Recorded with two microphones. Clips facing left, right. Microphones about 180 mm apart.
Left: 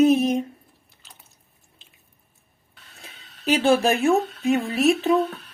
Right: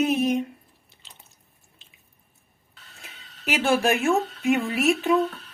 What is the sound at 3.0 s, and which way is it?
Speech, 35° left (ahead or behind).